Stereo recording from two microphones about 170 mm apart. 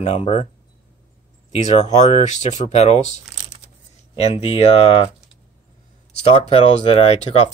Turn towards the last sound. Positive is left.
turn(degrees=40)  # may be behind; listen again after turning